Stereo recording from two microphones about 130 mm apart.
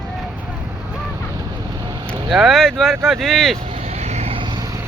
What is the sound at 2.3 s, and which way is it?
Speech, centre (ahead or behind).